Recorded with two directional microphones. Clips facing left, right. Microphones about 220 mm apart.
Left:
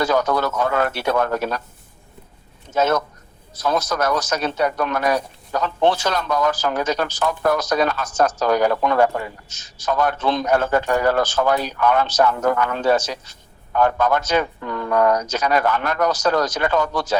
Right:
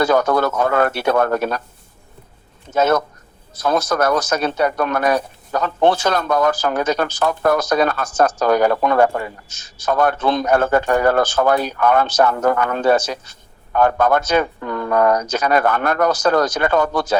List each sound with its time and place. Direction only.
0.0 s a man's voice: 55° right (ahead or behind)
2.7 s a man's voice: 55° right (ahead or behind)